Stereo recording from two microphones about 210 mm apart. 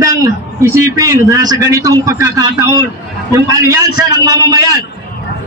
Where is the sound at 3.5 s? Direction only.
15° right (ahead or behind).